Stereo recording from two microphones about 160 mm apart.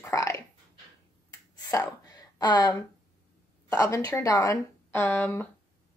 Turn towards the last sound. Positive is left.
turn(degrees=10)  # may be behind; listen again after turning